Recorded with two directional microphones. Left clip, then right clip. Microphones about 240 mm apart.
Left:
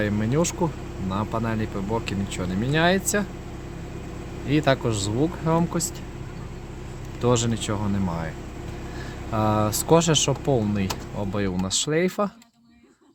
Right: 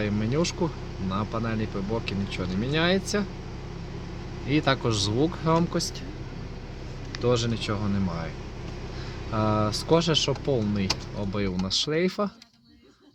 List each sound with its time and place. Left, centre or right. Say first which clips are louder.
0.0 s speech: left 3 dB; left
4.4 s speech: left 3 dB; centre
7.2 s speech: left 2 dB; left
9.3 s speech: left 3 dB; centre